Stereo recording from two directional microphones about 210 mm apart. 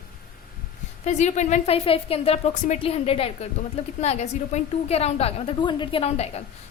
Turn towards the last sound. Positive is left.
turn(degrees=25)  # may be behind; listen again after turning